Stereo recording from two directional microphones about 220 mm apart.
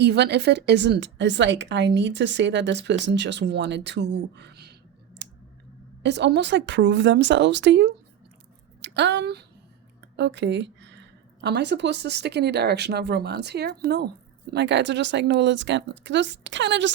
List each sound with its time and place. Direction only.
0.0 s a woman's voice: 50° right (ahead or behind)
6.0 s a woman's voice: 50° right (ahead or behind)